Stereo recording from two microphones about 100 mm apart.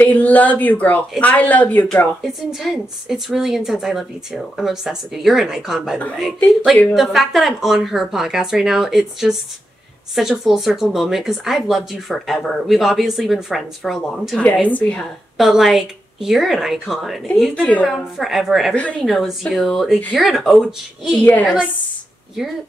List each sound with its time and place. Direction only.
0.0 s speech: 15° left (ahead or behind)
2.2 s speech: 5° right (ahead or behind)
14.4 s speech: 15° left (ahead or behind)
15.3 s speech: centre (ahead or behind)
17.6 s speech: 15° left (ahead or behind)
17.8 s speech: centre (ahead or behind)
18.7 s speech: 15° left (ahead or behind)
19.0 s speech: centre (ahead or behind)
21.2 s speech: 15° left (ahead or behind)